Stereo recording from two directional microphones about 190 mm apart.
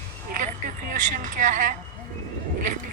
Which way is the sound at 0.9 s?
45° right (ahead or behind).